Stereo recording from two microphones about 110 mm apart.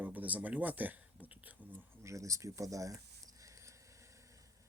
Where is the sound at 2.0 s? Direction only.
30° right (ahead or behind).